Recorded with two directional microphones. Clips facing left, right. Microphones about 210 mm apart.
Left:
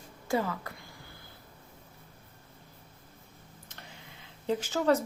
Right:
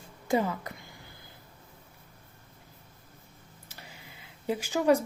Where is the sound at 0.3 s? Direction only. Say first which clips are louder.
Right 3 dB; 20° right (ahead or behind).